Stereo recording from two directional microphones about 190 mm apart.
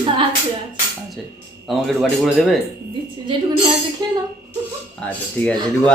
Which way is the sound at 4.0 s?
20° right (ahead or behind).